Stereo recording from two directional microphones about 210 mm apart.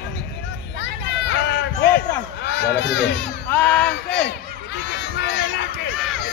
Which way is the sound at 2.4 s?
55° left (ahead or behind).